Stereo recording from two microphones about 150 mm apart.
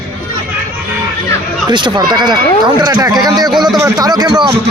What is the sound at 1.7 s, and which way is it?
Speech, 30° right (ahead or behind).